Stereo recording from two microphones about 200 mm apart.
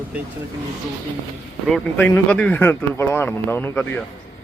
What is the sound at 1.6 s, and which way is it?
Speech, 5° left (ahead or behind).